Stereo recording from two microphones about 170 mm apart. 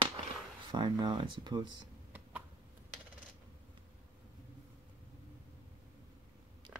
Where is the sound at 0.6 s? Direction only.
25° right (ahead or behind).